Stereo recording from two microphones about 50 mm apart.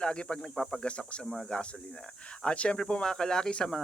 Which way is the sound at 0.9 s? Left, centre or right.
Left.